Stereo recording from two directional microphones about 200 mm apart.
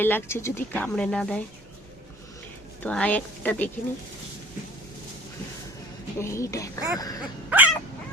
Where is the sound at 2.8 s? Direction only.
5° left (ahead or behind).